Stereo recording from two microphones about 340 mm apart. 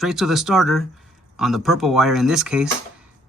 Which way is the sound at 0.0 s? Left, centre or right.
Centre.